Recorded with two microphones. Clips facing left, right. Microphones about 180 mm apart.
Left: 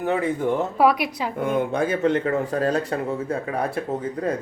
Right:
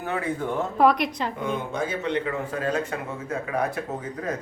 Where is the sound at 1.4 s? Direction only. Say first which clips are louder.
Left 8 dB; 55° left (ahead or behind).